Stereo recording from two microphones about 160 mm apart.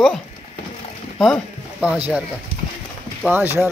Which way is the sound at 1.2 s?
Centre (ahead or behind).